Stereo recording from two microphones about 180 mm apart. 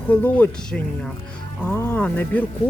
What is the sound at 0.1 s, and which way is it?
Speech, 10° left (ahead or behind).